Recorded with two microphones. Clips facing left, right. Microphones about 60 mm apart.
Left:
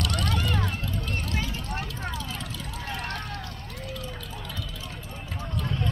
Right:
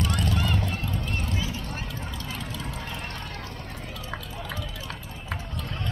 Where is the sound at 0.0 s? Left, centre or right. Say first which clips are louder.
Right 1 dB; left.